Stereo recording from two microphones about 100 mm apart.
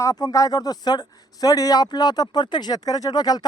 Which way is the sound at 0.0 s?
35° left (ahead or behind).